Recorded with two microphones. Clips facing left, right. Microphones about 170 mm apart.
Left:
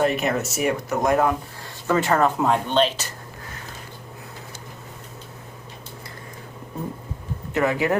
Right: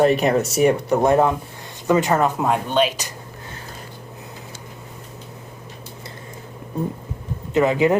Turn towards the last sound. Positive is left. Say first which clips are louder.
# right 5 dB
turn(degrees=-20)  # may be behind; listen again after turning